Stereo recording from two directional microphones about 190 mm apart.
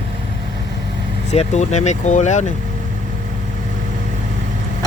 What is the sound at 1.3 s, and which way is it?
Speech, 35° left (ahead or behind).